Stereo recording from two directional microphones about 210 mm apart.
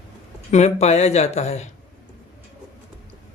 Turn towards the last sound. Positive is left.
turn(degrees=30)  # may be behind; listen again after turning